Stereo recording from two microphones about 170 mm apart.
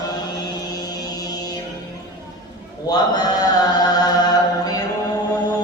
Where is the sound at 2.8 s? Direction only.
25° left (ahead or behind).